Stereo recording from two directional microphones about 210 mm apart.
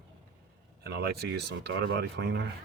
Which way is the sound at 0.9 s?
50° right (ahead or behind).